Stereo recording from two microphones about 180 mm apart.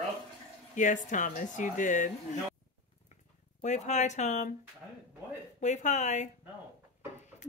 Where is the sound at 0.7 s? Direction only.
45° left (ahead or behind).